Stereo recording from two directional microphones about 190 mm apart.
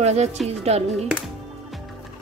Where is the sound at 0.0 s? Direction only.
35° right (ahead or behind).